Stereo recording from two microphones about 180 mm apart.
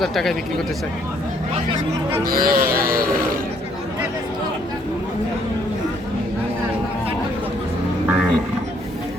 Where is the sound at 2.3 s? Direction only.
55° right (ahead or behind).